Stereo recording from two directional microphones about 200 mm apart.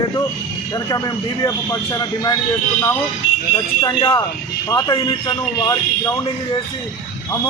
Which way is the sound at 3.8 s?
20° left (ahead or behind).